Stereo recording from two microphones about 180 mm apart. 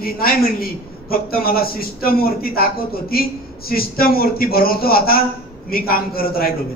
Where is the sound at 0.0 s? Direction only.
55° left (ahead or behind).